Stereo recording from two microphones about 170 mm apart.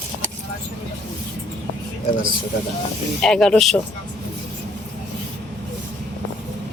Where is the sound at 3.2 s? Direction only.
Centre (ahead or behind).